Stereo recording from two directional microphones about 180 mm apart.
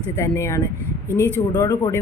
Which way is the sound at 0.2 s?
15° left (ahead or behind).